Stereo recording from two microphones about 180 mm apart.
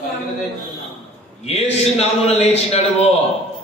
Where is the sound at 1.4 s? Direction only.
35° left (ahead or behind).